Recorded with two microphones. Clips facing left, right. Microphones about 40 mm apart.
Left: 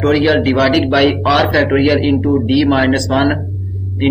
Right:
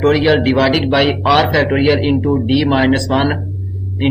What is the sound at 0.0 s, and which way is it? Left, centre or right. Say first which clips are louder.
Speech: even; centre.